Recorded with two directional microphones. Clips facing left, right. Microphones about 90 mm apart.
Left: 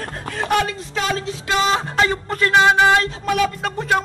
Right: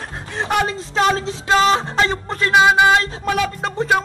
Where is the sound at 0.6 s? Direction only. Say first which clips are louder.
Right 5 dB; 30° right (ahead or behind); by 3.0 s 15° right (ahead or behind).